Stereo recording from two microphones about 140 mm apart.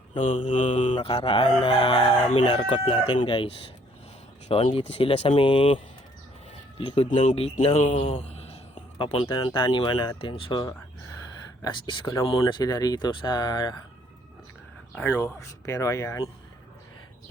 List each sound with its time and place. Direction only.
0.2 s mantra: 60° left (ahead or behind)
0.9 s chicken: 40° left (ahead or behind)
7.6 s speech: 55° left (ahead or behind)
9.6 s chicken: 30° left (ahead or behind)
12.2 s speech: 40° left (ahead or behind)
15.1 s speech: 20° left (ahead or behind)